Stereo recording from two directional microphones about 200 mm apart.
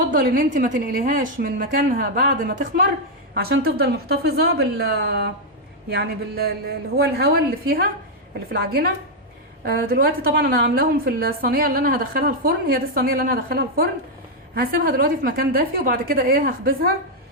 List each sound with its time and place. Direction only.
0.1 s a woman's voice: 45° right (ahead or behind)